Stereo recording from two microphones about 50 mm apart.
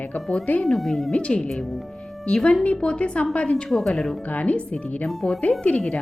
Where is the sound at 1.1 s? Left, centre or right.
Left.